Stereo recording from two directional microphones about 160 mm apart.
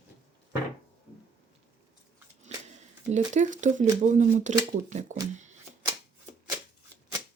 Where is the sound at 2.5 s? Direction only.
45° right (ahead or behind).